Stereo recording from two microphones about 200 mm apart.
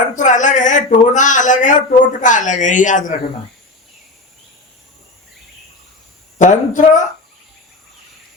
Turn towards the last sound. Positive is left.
turn(degrees=40)  # may be behind; listen again after turning